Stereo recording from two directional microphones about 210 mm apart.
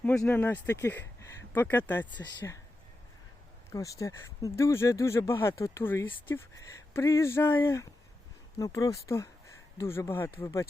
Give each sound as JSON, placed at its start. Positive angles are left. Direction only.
{"t": 0.0, "sound": "speech", "side_deg": 5}
{"t": 3.7, "sound": "speech", "side_deg": 15}